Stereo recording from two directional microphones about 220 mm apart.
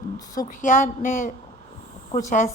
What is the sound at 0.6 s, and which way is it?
Speech, 35° left (ahead or behind).